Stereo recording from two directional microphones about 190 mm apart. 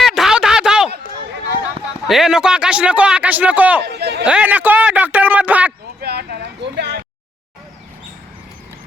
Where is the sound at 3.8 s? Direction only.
60° right (ahead or behind).